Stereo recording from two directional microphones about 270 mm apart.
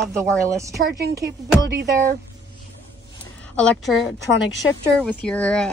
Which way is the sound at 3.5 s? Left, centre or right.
Centre.